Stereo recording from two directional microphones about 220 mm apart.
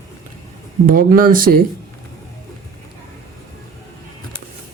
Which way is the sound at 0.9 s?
40° right (ahead or behind).